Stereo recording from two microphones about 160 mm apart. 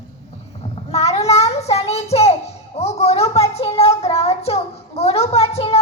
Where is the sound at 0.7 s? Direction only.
40° left (ahead or behind).